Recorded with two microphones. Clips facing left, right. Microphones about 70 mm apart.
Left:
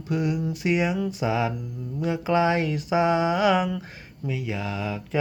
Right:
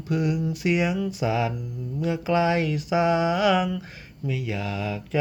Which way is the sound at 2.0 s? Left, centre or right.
Left.